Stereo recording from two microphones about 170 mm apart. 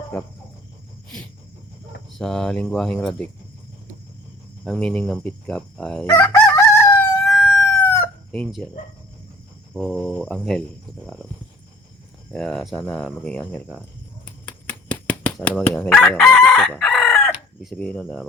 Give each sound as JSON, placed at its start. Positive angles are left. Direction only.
{"t": 2.1, "sound": "speech", "side_deg": 5}
{"t": 4.6, "sound": "speech", "side_deg": 5}
{"t": 6.1, "sound": "crowing", "side_deg": 15}
{"t": 7.3, "sound": "chicken", "side_deg": 5}
{"t": 9.8, "sound": "speech", "side_deg": 0}
{"t": 12.3, "sound": "speech", "side_deg": 5}
{"t": 14.4, "sound": "chicken", "side_deg": 10}
{"t": 17.6, "sound": "speech", "side_deg": 5}